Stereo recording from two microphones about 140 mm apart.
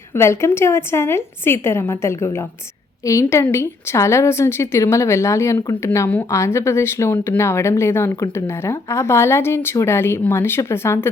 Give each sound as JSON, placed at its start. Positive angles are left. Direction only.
{"t": 0.1, "sound": "a woman's voice", "side_deg": 20}